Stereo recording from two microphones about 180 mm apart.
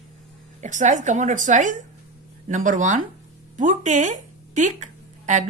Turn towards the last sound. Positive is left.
turn(degrees=-45)  # may be behind; listen again after turning